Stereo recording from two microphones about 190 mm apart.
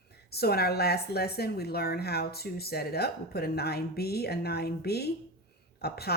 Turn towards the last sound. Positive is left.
turn(degrees=55)  # may be behind; listen again after turning